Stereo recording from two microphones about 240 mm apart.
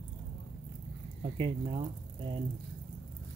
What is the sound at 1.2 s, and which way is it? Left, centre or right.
Speech, right.